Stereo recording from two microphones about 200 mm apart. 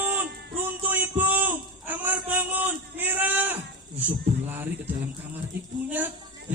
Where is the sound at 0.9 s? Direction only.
10° right (ahead or behind).